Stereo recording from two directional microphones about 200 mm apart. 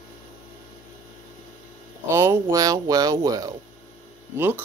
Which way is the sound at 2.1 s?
15° right (ahead or behind).